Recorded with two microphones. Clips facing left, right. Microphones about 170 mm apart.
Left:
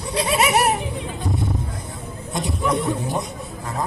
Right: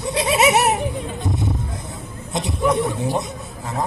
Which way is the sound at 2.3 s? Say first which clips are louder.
Right 3 dB; 20° right (ahead or behind).